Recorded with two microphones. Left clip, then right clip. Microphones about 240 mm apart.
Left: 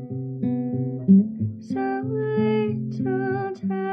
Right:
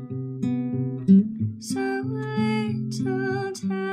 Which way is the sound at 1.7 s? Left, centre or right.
Centre.